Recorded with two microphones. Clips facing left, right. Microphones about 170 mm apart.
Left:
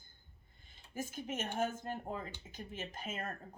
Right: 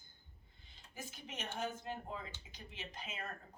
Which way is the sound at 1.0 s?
45° left (ahead or behind).